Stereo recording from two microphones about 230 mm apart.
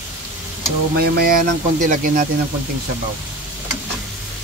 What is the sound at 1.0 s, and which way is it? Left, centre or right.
Speech, right.